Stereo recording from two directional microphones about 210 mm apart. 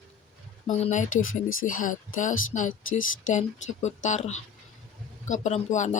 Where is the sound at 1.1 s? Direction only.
70° left (ahead or behind).